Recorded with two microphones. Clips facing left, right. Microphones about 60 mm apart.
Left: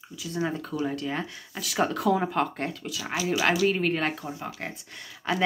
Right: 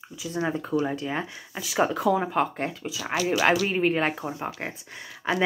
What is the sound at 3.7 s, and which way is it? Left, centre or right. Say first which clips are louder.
Speech: right 2 dB; centre.